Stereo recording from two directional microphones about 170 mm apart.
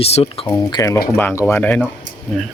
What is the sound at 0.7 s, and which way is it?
Speech, 20° left (ahead or behind).